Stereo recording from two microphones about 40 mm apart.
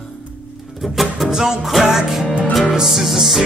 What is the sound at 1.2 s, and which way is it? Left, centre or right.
Music, centre.